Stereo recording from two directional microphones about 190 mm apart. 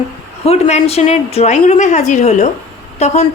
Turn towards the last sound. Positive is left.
turn(degrees=35)  # may be behind; listen again after turning